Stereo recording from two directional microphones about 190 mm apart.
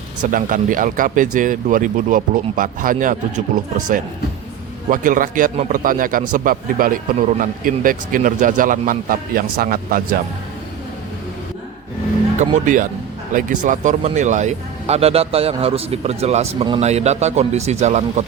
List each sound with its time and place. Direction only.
0.2 s a man's voice: 45° right (ahead or behind)
12.4 s a man's voice: 40° right (ahead or behind)